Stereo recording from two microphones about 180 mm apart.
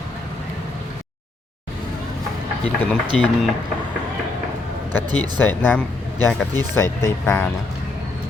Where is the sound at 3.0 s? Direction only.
25° right (ahead or behind).